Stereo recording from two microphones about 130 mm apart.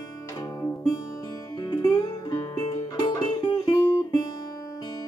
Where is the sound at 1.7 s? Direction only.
30° left (ahead or behind).